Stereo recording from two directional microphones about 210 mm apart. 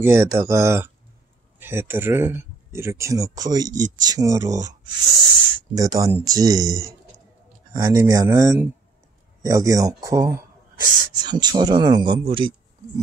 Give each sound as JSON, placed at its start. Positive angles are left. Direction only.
{"t": 0.0, "sound": "speech", "side_deg": -15}
{"t": 7.7, "sound": "speech", "side_deg": -15}